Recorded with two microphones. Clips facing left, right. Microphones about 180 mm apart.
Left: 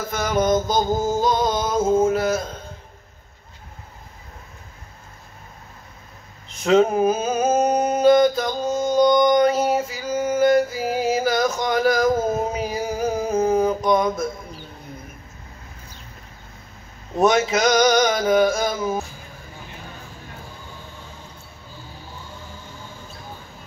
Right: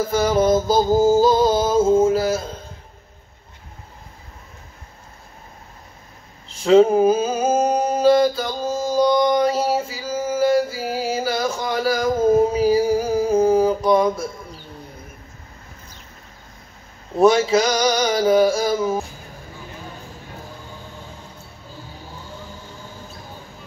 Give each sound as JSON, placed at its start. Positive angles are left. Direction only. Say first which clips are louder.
{"t": 0.1, "sound": "music", "louder": "right 2 dB", "side_deg": -30}
{"t": 6.5, "sound": "a sound", "louder": "right 4 dB", "side_deg": -30}
{"t": 17.2, "sound": "music", "louder": "right 3 dB", "side_deg": -30}